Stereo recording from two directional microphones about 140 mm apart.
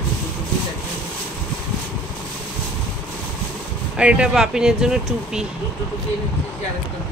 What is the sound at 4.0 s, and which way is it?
Speech, 5° right (ahead or behind).